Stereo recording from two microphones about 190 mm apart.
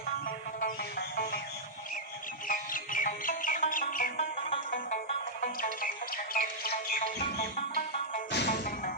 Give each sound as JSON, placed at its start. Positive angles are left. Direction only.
{"t": 0.3, "sound": "music", "side_deg": 50}
{"t": 2.5, "sound": "music", "side_deg": 45}
{"t": 8.3, "sound": "music", "side_deg": 60}